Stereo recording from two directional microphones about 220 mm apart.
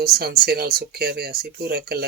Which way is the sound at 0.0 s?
45° right (ahead or behind).